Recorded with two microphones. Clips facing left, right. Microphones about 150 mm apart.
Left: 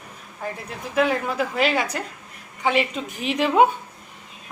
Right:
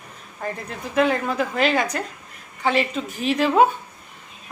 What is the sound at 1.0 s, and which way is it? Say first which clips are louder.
Speech: right 1 dB; 5° left (ahead or behind).